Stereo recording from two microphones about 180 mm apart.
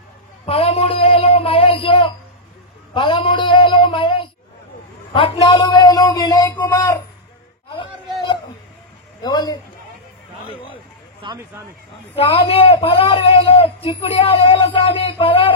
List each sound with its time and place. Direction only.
0.5 s child singing: 35° left (ahead or behind)
2.9 s a sound: 30° left (ahead or behind)
5.1 s speech: 25° left (ahead or behind)
9.2 s a sound: 20° left (ahead or behind)
11.2 s speech: 15° right (ahead or behind)
12.2 s a man's voice: 30° left (ahead or behind)